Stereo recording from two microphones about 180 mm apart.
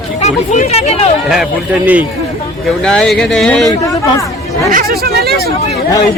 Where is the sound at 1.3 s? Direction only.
5° right (ahead or behind).